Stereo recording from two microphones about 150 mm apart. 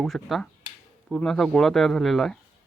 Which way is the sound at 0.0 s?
Centre (ahead or behind).